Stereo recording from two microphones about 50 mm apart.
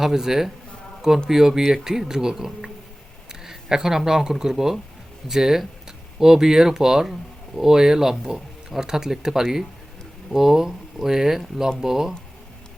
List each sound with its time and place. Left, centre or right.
0.0 s speech: centre